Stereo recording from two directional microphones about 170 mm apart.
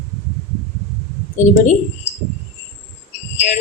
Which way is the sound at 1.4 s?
45° left (ahead or behind).